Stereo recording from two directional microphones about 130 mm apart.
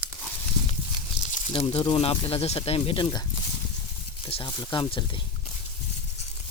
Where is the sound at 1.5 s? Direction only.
45° left (ahead or behind).